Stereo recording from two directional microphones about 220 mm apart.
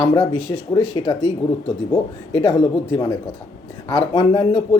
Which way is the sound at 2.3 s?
25° left (ahead or behind).